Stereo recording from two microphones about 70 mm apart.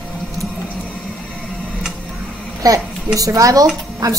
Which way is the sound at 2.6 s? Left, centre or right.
Right.